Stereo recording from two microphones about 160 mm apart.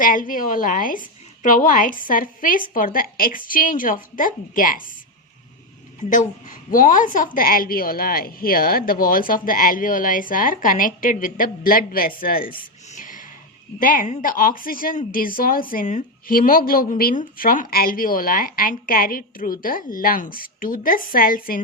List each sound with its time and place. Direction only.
0.0 s a woman's voice: 60° left (ahead or behind)
6.0 s a woman's voice: 45° left (ahead or behind); by 12.5 s 65° left (ahead or behind)
13.0 s a sound: 55° left (ahead or behind)
13.7 s a woman's voice: 55° left (ahead or behind)